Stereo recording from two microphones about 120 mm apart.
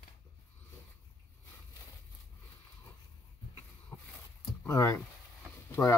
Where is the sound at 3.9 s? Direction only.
30° left (ahead or behind).